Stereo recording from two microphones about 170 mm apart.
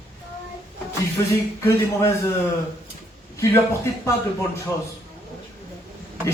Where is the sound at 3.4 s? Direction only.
20° left (ahead or behind).